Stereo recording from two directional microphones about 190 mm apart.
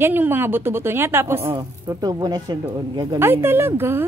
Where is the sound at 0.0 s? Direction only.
10° right (ahead or behind).